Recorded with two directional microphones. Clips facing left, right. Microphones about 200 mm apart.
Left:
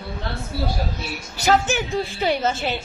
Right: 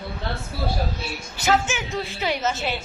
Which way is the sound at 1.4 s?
35° left (ahead or behind).